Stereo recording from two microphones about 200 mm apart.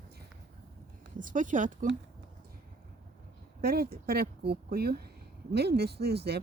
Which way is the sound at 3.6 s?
50° right (ahead or behind).